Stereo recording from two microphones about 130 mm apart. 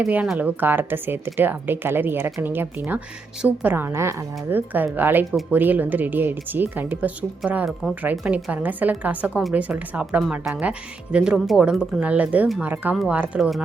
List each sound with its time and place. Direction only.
0.0 s a woman's voice: 5° right (ahead or behind)